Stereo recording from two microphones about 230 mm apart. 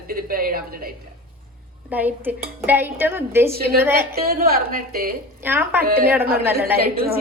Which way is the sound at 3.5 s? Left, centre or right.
Right.